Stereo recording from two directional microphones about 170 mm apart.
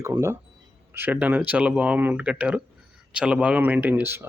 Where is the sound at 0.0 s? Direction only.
15° right (ahead or behind).